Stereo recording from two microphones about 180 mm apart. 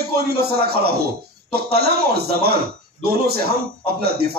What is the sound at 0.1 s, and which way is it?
Speech, 60° right (ahead or behind).